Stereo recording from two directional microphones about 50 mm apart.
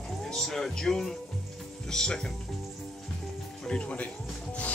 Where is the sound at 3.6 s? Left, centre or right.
Centre.